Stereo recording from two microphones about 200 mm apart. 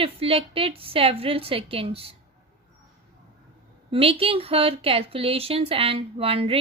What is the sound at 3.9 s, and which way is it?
Speech, 30° right (ahead or behind).